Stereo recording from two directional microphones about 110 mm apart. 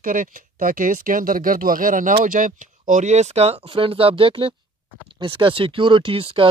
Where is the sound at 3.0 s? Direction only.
90° right.